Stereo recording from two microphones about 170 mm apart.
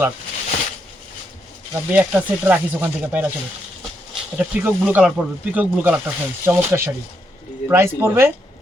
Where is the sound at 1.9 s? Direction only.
5° right (ahead or behind).